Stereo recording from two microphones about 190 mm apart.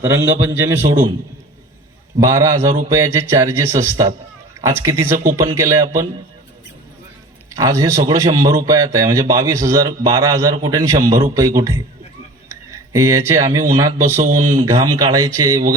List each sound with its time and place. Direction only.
0.0 s a man's voice: 10° right (ahead or behind)
2.2 s a man's voice: 15° right (ahead or behind)
7.5 s a man's voice: 20° right (ahead or behind)